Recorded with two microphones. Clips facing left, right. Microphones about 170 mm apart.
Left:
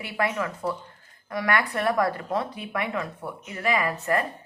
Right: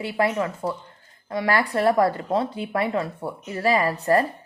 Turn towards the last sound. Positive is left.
turn(degrees=-35)  # may be behind; listen again after turning